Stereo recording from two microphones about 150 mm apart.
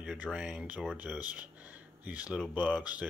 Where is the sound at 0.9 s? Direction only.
10° right (ahead or behind).